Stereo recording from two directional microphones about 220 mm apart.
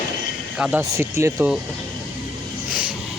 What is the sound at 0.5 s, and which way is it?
Speech, centre (ahead or behind).